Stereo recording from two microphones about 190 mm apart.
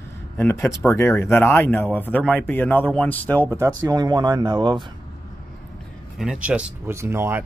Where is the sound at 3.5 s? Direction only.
20° right (ahead or behind).